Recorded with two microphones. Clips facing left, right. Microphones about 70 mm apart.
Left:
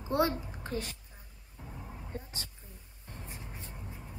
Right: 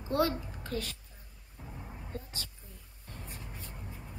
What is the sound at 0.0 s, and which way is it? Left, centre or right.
Speech, left.